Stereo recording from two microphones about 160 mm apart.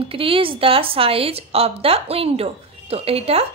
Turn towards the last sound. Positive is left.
turn(degrees=-40)  # may be behind; listen again after turning